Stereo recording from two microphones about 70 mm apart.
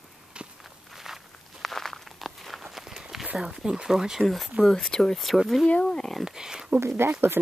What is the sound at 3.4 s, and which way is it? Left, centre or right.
Speech, centre.